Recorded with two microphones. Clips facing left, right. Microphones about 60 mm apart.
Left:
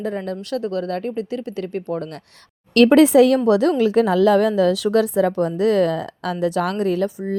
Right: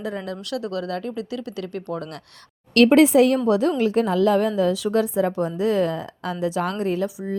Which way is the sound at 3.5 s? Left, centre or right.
Left.